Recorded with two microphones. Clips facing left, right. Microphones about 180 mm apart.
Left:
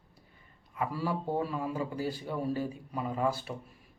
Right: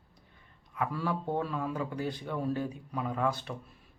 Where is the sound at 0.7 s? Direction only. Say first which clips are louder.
Even; 10° left (ahead or behind).